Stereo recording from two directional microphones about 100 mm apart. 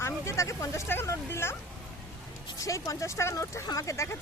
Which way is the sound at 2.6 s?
35° left (ahead or behind).